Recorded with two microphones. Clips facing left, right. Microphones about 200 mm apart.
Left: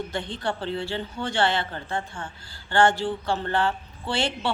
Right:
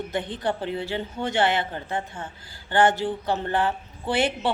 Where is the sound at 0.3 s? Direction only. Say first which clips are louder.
Left 1 dB; 15° right (ahead or behind).